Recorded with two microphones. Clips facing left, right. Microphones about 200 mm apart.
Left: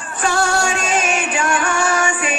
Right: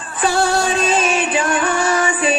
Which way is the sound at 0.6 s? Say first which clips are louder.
Right 3 dB; 35° right (ahead or behind).